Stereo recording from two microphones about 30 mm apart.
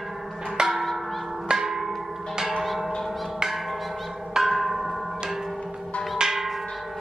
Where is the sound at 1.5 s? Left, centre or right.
Centre.